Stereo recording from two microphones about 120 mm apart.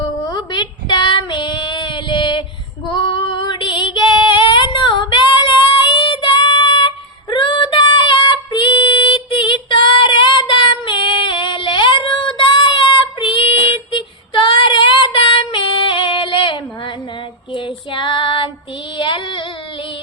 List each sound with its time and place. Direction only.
0.3 s child singing: 40° left (ahead or behind)
2.9 s female singing: 40° left (ahead or behind)
5.9 s child singing: 45° left (ahead or behind)
7.3 s female singing: 40° left (ahead or behind)
17.5 s child singing: 45° left (ahead or behind)
18.9 s female singing: 45° left (ahead or behind)